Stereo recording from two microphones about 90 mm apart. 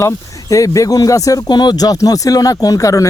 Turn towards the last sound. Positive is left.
turn(degrees=40)  # may be behind; listen again after turning